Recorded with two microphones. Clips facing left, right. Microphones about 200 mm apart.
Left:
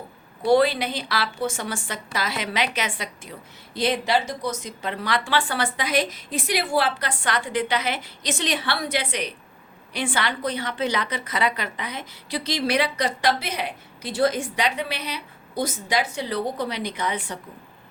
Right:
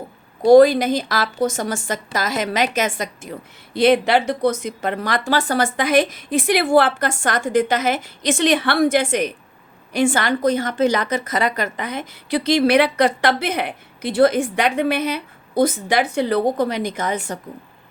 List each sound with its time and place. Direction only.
0.4 s a woman's voice: 45° right (ahead or behind)
3.8 s a woman's voice: 60° right (ahead or behind); by 17.3 s 45° right (ahead or behind)